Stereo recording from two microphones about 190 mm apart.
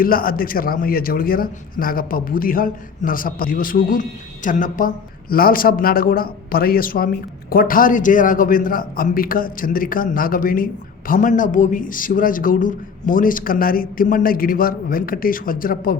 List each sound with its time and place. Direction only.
0.0 s a man's voice: 50° left (ahead or behind)